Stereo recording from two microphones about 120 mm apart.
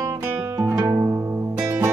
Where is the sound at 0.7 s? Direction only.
20° right (ahead or behind).